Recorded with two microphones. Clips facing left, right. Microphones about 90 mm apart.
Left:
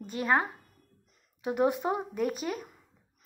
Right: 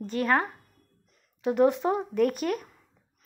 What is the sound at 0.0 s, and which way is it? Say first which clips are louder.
A woman's voice: right 2 dB; 10° left (ahead or behind).